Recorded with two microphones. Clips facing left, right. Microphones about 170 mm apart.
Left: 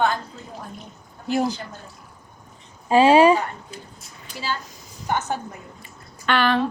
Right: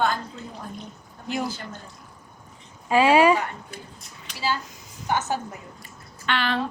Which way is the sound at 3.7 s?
60° right (ahead or behind).